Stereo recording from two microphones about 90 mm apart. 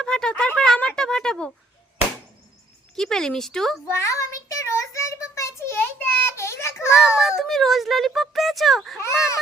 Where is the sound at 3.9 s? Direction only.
35° left (ahead or behind).